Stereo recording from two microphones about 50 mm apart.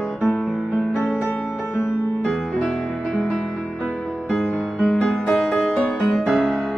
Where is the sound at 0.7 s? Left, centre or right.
Left.